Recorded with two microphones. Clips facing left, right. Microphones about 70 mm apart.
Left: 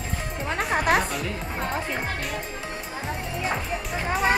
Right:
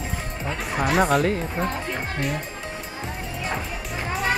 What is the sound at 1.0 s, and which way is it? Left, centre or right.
Speech, right.